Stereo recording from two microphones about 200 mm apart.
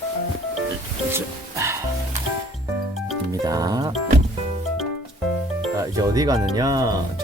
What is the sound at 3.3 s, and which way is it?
Music, 15° right (ahead or behind).